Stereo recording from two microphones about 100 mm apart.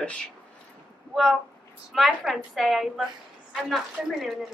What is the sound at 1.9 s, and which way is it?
Speech, centre (ahead or behind).